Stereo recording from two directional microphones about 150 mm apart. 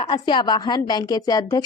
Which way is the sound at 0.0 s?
30° left (ahead or behind).